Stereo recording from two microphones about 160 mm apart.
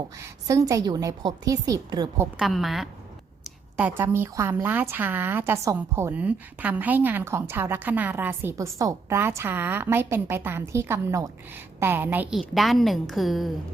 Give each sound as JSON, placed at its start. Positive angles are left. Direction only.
{"t": 0.4, "sound": "a woman's voice", "side_deg": -20}
{"t": 2.4, "sound": "a woman's voice", "side_deg": 0}
{"t": 12.4, "sound": "a woman's voice", "side_deg": 0}